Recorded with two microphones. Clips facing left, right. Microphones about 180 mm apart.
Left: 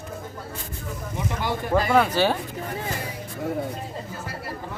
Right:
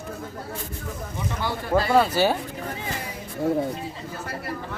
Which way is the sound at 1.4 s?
15° left (ahead or behind).